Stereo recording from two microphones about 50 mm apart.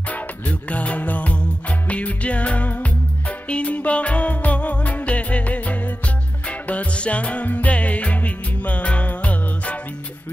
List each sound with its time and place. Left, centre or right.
0.1 s music: left